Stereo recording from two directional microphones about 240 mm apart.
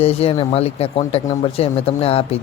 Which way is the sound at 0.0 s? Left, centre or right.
Left.